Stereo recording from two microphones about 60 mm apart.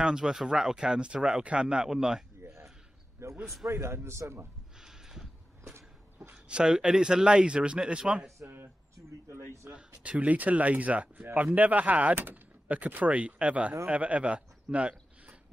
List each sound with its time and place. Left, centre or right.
0.0 s speech: centre
3.2 s a man's voice: right
4.7 s a sound: centre
5.6 s a sound: right
6.3 s speech: centre
10.0 s speech: right